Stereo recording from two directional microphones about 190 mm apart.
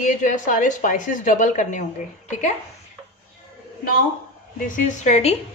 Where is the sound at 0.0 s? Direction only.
40° left (ahead or behind).